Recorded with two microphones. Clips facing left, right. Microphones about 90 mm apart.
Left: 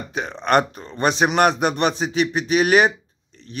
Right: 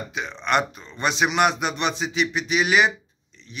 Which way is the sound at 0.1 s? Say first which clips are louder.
Left 5 dB; 45° left (ahead or behind).